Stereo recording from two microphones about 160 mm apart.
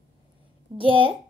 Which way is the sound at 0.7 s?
30° right (ahead or behind).